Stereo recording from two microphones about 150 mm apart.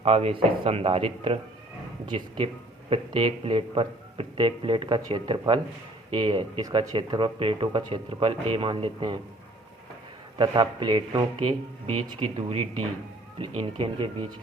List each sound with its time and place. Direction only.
0.0 s speech: 40° right (ahead or behind)
10.3 s speech: 30° right (ahead or behind)